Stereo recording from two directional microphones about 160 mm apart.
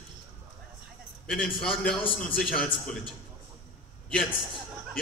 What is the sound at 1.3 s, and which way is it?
A man's voice, centre (ahead or behind).